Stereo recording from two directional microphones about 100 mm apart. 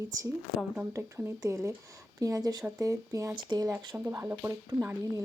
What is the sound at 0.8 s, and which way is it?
Speech, 25° right (ahead or behind).